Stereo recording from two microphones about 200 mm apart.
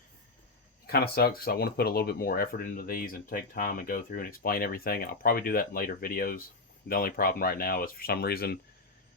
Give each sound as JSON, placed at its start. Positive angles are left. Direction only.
{"t": 0.9, "sound": "speech", "side_deg": 50}